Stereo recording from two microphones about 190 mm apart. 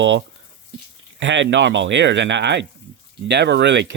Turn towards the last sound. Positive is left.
turn(degrees=-65)  # may be behind; listen again after turning